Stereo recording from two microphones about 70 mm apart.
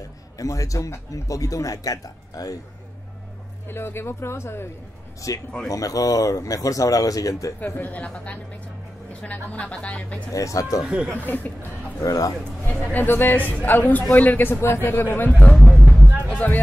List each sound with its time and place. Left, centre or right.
0.4 s speech: left
3.6 s speech: left
5.2 s speech: left
7.6 s a man's voice: left
10.3 s speech: left
10.8 s speech: centre
11.1 s a man's voice: left
12.0 s speech: left
12.9 s a man's voice: left
15.5 s vehicle: centre
16.2 s music: left